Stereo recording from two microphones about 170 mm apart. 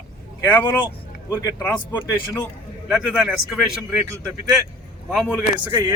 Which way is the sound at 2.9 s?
5° right (ahead or behind).